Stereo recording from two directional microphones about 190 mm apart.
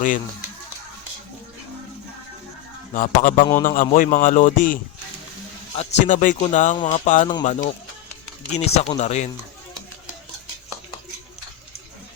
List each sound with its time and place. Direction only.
2.9 s speech: 45° left (ahead or behind)
6.7 s speech: 25° left (ahead or behind)
7.0 s speech: 40° left (ahead or behind)